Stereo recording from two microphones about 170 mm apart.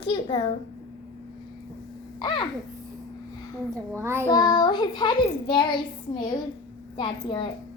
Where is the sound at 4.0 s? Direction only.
15° right (ahead or behind).